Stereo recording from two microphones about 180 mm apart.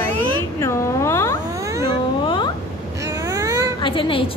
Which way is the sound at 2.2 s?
25° left (ahead or behind).